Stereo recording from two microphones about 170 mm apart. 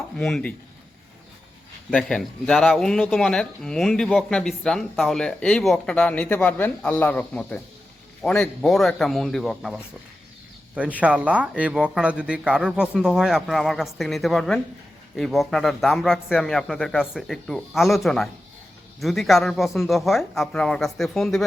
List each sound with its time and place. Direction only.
0.2 s speech: 5° left (ahead or behind)
1.9 s speech: 5° left (ahead or behind)